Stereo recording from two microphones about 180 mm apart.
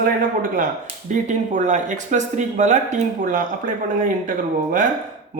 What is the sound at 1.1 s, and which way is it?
Speech, 45° right (ahead or behind).